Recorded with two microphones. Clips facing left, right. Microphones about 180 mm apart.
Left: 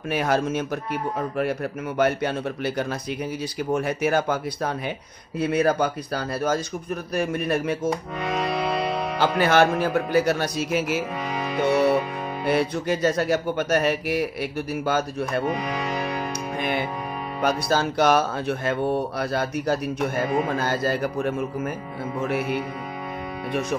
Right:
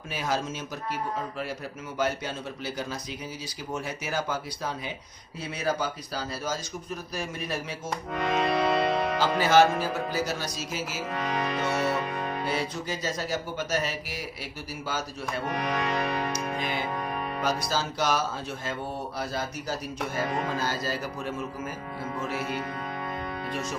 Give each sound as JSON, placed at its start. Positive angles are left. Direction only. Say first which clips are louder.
{"t": 0.1, "sound": "speech", "louder": "left 8 dB", "side_deg": 60}
{"t": 2.0, "sound": "speech", "louder": "left 7 dB", "side_deg": 60}
{"t": 8.2, "sound": "music", "louder": "right 4 dB", "side_deg": 0}
{"t": 9.2, "sound": "speech", "louder": "left 3 dB", "side_deg": 60}
{"t": 11.2, "sound": "music", "louder": "left 1 dB", "side_deg": 5}
{"t": 11.5, "sound": "music", "louder": "left 11 dB", "side_deg": 60}
{"t": 12.4, "sound": "speech", "louder": "left 13 dB", "side_deg": 60}
{"t": 15.5, "sound": "music", "louder": "left 1 dB", "side_deg": 5}
{"t": 16.5, "sound": "music", "louder": "left 5 dB", "side_deg": 60}
{"t": 17.4, "sound": "speech", "louder": "left 7 dB", "side_deg": 60}